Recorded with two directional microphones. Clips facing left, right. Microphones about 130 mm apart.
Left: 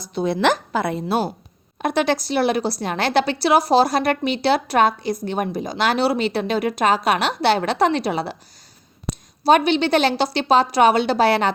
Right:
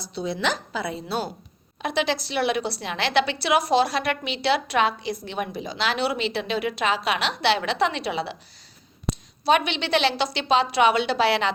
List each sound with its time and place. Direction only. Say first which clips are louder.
0.0 s a woman's voice: left 7 dB; 55° left (ahead or behind)
9.4 s a woman's voice: left 6 dB; 40° left (ahead or behind)